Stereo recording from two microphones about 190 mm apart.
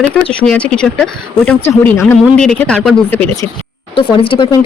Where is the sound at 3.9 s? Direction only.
30° left (ahead or behind).